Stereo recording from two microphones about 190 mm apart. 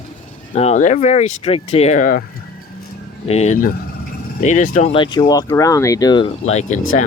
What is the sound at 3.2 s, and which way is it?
Speech, 35° left (ahead or behind).